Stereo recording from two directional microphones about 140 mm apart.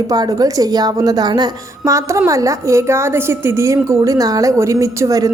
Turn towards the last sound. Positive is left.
turn(degrees=-25)  # may be behind; listen again after turning